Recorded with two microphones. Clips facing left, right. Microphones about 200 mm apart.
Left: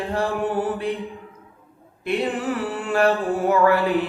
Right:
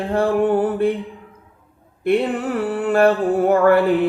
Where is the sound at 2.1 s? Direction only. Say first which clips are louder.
Right 5 dB; 55° right (ahead or behind).